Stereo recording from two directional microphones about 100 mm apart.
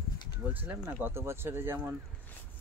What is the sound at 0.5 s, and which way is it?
Speech, 15° right (ahead or behind).